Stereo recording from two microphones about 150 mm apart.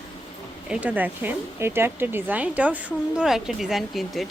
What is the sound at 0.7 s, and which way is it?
A woman's voice, 10° right (ahead or behind).